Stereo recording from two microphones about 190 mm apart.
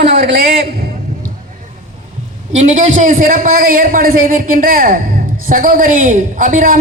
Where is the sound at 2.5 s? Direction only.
40° right (ahead or behind).